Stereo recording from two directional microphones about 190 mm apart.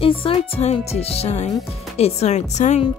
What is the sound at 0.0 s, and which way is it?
Speech, 30° left (ahead or behind).